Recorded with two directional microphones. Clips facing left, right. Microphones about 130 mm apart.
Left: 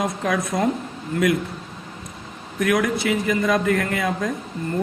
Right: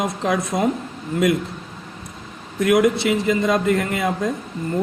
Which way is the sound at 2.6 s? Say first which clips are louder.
Right 4 dB; 25° right (ahead or behind).